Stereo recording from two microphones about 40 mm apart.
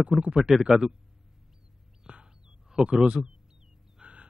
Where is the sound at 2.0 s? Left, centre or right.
Right.